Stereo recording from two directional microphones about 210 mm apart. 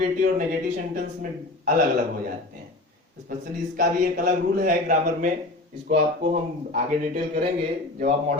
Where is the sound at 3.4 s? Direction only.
40° right (ahead or behind).